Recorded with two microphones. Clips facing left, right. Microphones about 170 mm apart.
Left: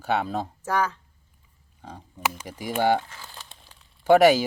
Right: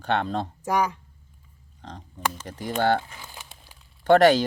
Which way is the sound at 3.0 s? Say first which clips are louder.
Even; 15° right (ahead or behind).